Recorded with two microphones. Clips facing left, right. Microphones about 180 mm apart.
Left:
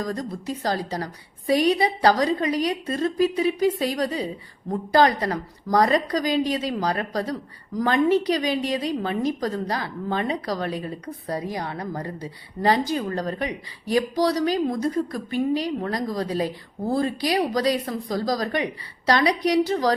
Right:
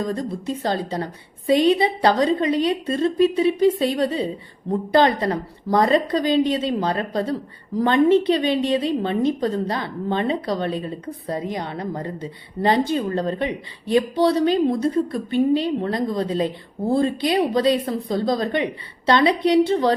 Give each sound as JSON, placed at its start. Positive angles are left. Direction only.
{"t": 0.0, "sound": "a woman's voice", "side_deg": -25}